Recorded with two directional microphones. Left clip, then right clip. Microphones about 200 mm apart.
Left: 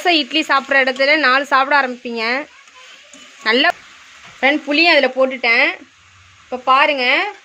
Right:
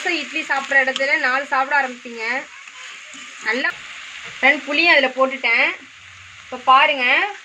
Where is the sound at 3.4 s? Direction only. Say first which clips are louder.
Left 7 dB; 55° left (ahead or behind).